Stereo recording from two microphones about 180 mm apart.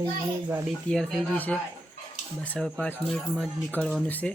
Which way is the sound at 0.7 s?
Centre (ahead or behind).